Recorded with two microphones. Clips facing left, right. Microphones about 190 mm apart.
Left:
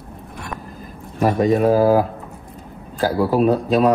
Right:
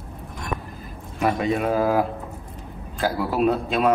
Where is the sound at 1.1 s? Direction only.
35° left (ahead or behind).